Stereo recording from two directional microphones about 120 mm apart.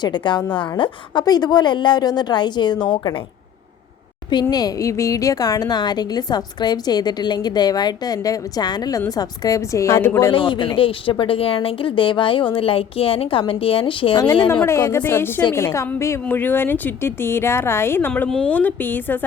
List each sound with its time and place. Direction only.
0.0 s speech: 40° left (ahead or behind)
4.3 s speech: 35° left (ahead or behind); by 10.3 s 20° left (ahead or behind)
10.3 s speech: 45° left (ahead or behind)
14.6 s a woman's voice: 20° left (ahead or behind)
18.1 s a woman's voice: 5° left (ahead or behind)